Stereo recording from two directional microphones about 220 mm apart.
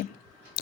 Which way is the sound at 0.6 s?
45° left (ahead or behind).